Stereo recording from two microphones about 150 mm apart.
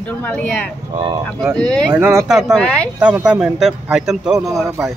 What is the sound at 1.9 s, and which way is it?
Speech, 15° right (ahead or behind).